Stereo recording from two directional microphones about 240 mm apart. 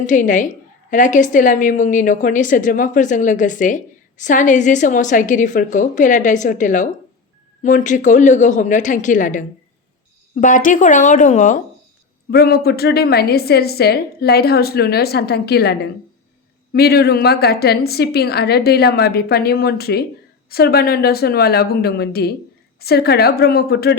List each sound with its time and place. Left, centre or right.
0.0 s a woman's voice: left
16.7 s a woman's voice: left